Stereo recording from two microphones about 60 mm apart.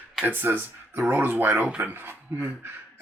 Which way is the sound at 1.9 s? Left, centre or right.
Right.